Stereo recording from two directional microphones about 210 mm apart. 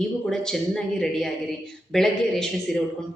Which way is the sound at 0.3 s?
Centre (ahead or behind).